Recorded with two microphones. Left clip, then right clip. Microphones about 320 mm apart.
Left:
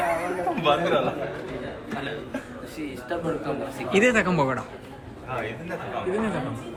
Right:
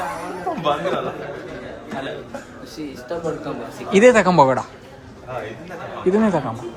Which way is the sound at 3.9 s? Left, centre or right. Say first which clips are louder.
Right 8 dB; centre.